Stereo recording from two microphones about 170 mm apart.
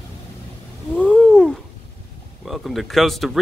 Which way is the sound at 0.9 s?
5° left (ahead or behind).